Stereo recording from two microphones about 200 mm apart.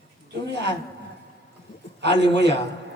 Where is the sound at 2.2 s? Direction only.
60° right (ahead or behind).